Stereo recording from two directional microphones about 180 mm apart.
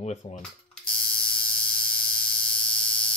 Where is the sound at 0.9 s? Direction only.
5° left (ahead or behind).